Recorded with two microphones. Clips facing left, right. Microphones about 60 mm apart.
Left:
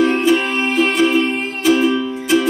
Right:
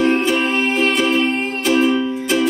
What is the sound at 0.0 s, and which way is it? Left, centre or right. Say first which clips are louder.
Music: left 2 dB; centre.